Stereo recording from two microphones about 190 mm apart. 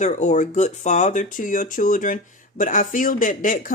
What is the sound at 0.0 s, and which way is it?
Speech, 40° left (ahead or behind).